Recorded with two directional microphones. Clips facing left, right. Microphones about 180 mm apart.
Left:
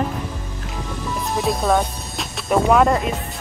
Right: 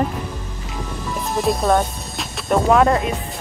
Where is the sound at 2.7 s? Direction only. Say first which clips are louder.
Right 1 dB; centre (ahead or behind).